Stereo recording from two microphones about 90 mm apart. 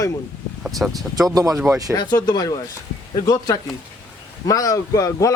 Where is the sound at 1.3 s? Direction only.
40° right (ahead or behind).